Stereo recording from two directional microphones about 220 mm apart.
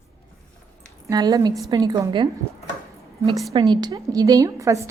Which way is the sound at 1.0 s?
20° right (ahead or behind).